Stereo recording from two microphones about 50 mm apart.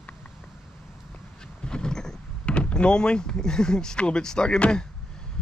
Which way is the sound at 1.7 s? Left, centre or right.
Centre.